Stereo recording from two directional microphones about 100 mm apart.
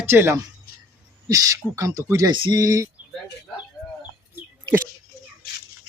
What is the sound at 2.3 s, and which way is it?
Speech, 55° right (ahead or behind).